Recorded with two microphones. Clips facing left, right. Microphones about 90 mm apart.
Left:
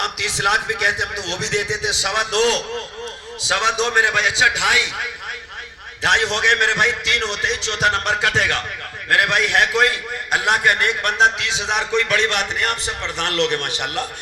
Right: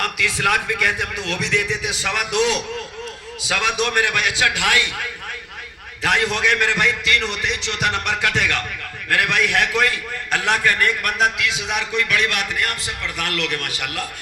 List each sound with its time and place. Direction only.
0.0 s a man's voice: 25° left (ahead or behind)
2.3 s a man's voice: 35° left (ahead or behind)
6.0 s a man's voice: 25° left (ahead or behind)